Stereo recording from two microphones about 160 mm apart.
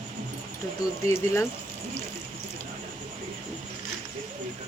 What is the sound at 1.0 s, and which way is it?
Speech, 15° left (ahead or behind).